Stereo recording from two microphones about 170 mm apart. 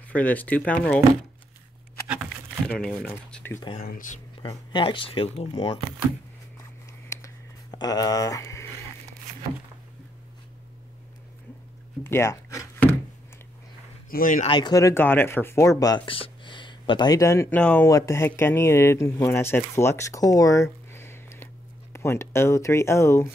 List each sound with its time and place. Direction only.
0.1 s speech: 10° left (ahead or behind)
2.2 s typing: 5° left (ahead or behind)
3.8 s speech: 55° left (ahead or behind)
4.4 s speech: 30° left (ahead or behind)
7.1 s a sound: 20° left (ahead or behind)
12.0 s a sound: 15° left (ahead or behind)
14.1 s speech: 50° left (ahead or behind)
14.5 s speech: 25° left (ahead or behind)